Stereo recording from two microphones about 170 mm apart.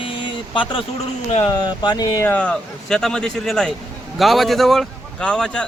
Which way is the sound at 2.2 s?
10° left (ahead or behind).